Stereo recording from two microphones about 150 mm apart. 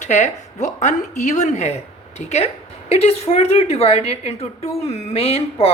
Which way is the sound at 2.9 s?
45° left (ahead or behind).